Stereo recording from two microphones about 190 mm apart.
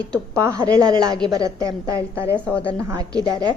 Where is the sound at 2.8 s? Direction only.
20° right (ahead or behind).